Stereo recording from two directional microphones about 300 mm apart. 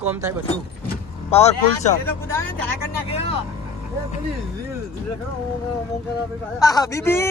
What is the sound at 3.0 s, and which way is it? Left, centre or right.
Speech, centre.